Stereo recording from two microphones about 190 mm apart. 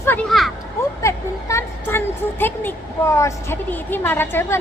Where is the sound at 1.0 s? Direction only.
15° left (ahead or behind).